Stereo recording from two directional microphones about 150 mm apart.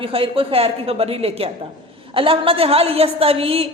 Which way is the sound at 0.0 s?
40° right (ahead or behind).